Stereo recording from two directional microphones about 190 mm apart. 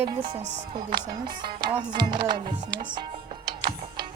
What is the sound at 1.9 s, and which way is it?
Speech, 25° right (ahead or behind).